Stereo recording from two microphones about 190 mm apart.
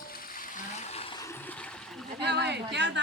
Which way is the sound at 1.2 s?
10° left (ahead or behind).